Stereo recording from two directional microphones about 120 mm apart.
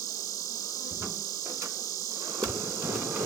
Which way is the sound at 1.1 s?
30° left (ahead or behind).